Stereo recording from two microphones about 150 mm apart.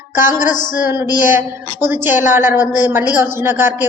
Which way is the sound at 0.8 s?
15° right (ahead or behind).